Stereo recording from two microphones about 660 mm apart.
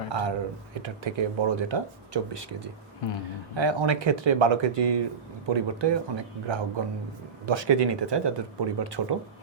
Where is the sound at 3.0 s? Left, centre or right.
Left.